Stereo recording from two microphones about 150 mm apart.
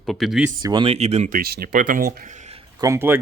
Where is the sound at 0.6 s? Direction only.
30° right (ahead or behind).